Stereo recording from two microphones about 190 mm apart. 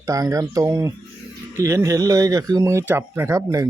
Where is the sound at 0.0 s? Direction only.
15° right (ahead or behind).